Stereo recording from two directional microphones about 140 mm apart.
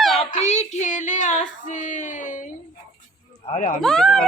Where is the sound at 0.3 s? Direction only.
55° left (ahead or behind).